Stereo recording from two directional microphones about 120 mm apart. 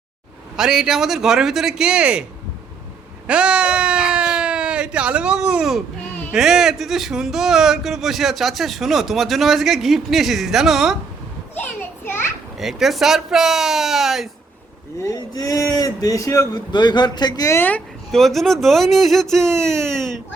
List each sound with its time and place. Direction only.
0.5 s speech: 5° right (ahead or behind)
3.2 s a sound: 10° right (ahead or behind)
6.3 s speech: 5° right (ahead or behind)
12.5 s speech: centre (ahead or behind)
15.0 s speech: 30° left (ahead or behind)
17.6 s speech: 15° left (ahead or behind)
18.1 s speech: centre (ahead or behind)
19.6 s speech: 20° right (ahead or behind)